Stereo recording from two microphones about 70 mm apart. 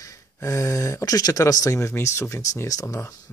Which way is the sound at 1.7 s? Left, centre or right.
Left.